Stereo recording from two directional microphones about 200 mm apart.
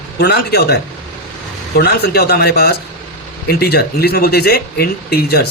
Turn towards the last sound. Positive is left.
turn(degrees=55)  # may be behind; listen again after turning